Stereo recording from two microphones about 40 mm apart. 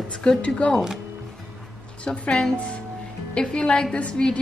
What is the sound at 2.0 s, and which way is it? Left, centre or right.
A woman's voice, left.